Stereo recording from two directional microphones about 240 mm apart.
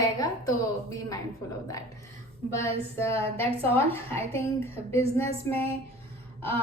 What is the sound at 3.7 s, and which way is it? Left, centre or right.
Speech, centre.